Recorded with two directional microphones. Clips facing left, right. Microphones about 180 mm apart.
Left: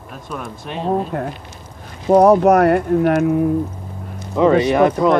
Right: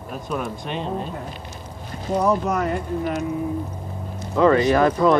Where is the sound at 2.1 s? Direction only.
65° left (ahead or behind).